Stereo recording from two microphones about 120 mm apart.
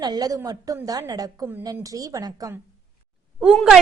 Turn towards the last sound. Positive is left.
turn(degrees=0)  # may be behind; listen again after turning